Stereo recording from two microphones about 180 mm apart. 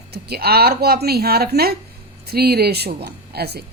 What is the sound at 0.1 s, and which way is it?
A woman's voice, 60° right (ahead or behind).